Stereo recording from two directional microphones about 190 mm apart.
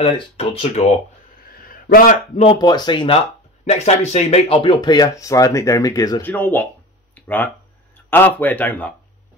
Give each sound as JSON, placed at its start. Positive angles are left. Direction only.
{"t": 0.0, "sound": "speech", "side_deg": 35}
{"t": 1.5, "sound": "a sound", "side_deg": 50}
{"t": 2.3, "sound": "speech", "side_deg": 30}